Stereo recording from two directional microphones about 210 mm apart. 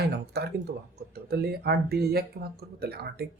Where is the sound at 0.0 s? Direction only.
50° right (ahead or behind).